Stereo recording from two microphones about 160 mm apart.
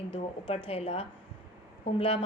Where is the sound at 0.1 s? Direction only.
35° left (ahead or behind).